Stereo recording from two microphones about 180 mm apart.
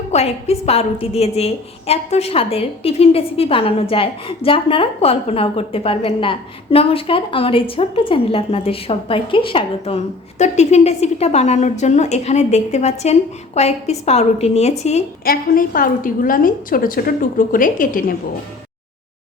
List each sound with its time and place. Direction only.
0.1 s a woman's voice: 35° left (ahead or behind)
15.2 s a woman's voice: 55° left (ahead or behind)